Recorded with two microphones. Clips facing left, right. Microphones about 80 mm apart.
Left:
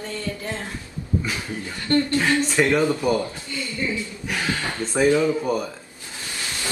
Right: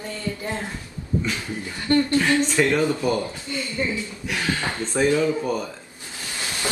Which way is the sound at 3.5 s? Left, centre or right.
Right.